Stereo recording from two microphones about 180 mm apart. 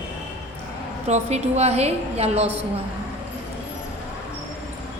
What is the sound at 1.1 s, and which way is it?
A woman's voice, 35° right (ahead or behind).